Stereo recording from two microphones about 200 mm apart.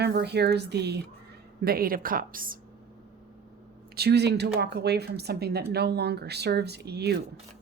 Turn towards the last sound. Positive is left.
turn(degrees=-55)  # may be behind; listen again after turning